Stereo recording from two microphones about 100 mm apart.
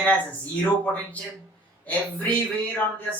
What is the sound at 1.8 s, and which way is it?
Speech, 15° left (ahead or behind).